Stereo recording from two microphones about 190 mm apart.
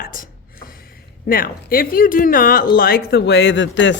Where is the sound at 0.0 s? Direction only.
45° left (ahead or behind).